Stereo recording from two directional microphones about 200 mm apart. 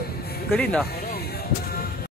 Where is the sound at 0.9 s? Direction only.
50° left (ahead or behind).